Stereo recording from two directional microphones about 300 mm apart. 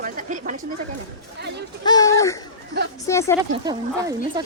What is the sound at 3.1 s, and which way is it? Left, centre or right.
Speech, centre.